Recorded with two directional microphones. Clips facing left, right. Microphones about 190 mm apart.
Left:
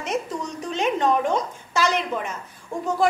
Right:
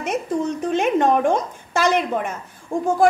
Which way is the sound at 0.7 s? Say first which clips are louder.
Right 3 dB; 50° right (ahead or behind).